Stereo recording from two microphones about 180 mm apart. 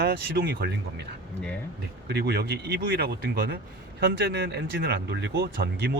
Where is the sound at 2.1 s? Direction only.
60° right (ahead or behind).